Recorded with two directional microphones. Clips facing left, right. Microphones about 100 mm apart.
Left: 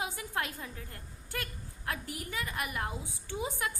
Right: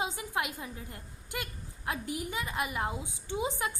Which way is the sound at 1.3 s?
15° right (ahead or behind).